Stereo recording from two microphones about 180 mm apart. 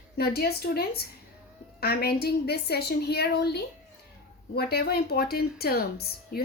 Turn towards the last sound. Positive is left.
turn(degrees=60)  # may be behind; listen again after turning